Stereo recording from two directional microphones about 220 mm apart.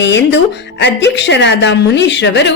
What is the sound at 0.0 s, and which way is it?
Speech, 55° left (ahead or behind).